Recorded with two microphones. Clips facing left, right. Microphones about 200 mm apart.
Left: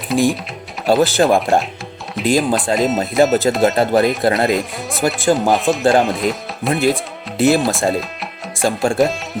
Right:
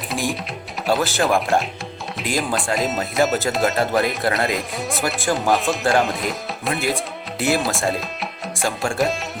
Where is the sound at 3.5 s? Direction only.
30° left (ahead or behind).